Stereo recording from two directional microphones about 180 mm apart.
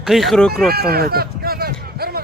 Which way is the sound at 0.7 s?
60° right (ahead or behind).